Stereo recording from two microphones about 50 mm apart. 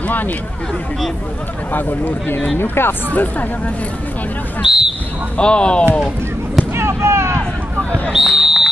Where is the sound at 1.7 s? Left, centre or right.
Left.